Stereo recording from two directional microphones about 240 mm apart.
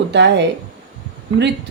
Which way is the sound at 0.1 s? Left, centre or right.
Right.